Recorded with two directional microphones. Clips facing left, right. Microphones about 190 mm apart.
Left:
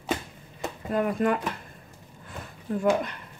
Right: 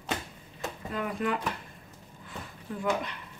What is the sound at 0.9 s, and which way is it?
Speech, 45° left (ahead or behind).